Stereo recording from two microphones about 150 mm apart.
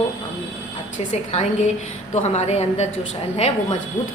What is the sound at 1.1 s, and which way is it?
A woman's voice, 50° left (ahead or behind).